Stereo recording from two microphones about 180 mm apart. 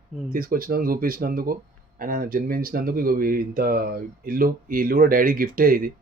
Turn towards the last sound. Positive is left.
turn(degrees=-55)  # may be behind; listen again after turning